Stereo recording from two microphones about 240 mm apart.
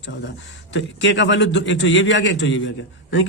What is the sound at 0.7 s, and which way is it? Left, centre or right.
A man's voice, left.